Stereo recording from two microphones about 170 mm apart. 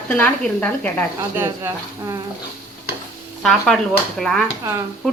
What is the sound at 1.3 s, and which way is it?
Speech, 15° right (ahead or behind).